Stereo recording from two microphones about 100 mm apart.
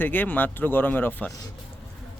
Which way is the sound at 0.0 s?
20° left (ahead or behind).